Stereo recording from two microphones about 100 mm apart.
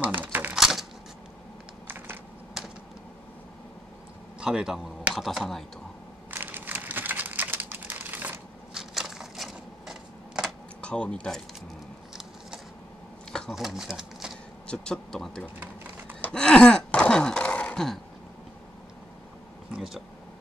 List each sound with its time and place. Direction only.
0.0 s a sound: 20° right (ahead or behind)
0.6 s typewriter: 5° right (ahead or behind)
1.9 s typing: 20° right (ahead or behind)
4.4 s speech: 10° right (ahead or behind)
6.3 s a sound: 20° right (ahead or behind)
8.7 s a sound: 5° right (ahead or behind)
10.8 s speech: 10° left (ahead or behind)
13.3 s a sound: 5° left (ahead or behind)
14.7 s speech: 5° left (ahead or behind)
15.6 s typing: 20° right (ahead or behind)
16.2 s gasp: 10° left (ahead or behind)
19.7 s speech: 5° right (ahead or behind)